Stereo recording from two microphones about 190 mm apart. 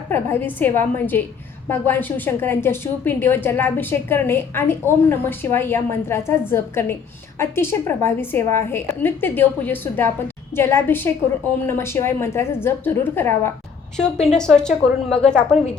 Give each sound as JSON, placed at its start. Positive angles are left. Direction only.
{"t": 0.1, "sound": "a woman's voice", "side_deg": 10}